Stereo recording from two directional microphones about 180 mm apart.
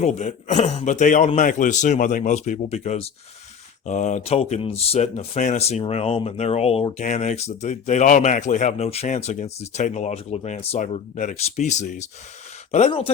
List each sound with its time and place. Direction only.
0.0 s a man's voice: 40° left (ahead or behind)